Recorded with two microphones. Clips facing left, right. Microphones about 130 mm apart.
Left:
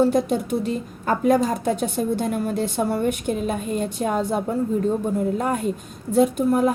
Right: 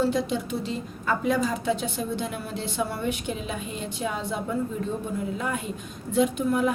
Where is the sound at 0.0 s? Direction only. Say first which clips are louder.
Left 6 dB; 45° left (ahead or behind).